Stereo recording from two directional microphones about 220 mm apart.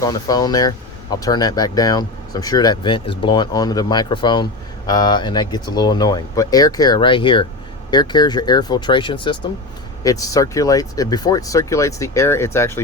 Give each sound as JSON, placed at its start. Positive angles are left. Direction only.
{"t": 0.0, "sound": "speech", "side_deg": 15}